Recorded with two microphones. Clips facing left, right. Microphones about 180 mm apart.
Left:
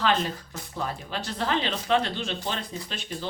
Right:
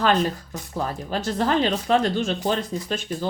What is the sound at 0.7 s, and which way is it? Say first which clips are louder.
Speech: right 5 dB; 45° right (ahead or behind).